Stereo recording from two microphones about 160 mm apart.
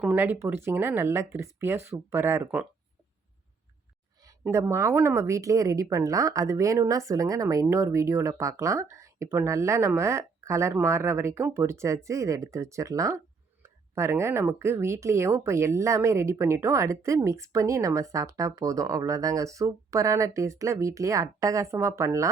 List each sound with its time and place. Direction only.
0.0 s speech: 10° right (ahead or behind)
4.4 s speech: 15° right (ahead or behind)